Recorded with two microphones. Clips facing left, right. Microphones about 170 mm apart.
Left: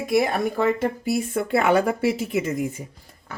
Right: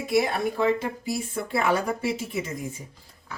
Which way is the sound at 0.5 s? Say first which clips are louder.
Left 2 dB; 60° left (ahead or behind).